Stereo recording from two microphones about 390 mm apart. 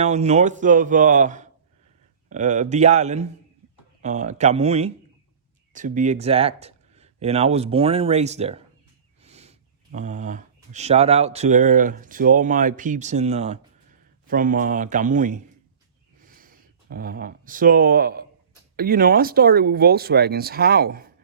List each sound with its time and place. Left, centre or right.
0.0 s speech: centre
16.1 s a sound: right
18.8 s speech: right